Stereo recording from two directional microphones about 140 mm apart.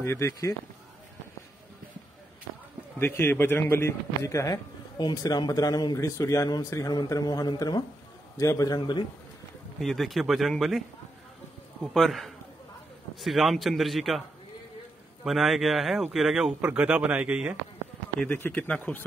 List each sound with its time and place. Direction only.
0.0 s speech: 20° left (ahead or behind)
3.0 s speech: 15° left (ahead or behind)
9.8 s speech: centre (ahead or behind)
11.8 s speech: centre (ahead or behind)
15.2 s speech: centre (ahead or behind)
18.2 s speech: 10° left (ahead or behind)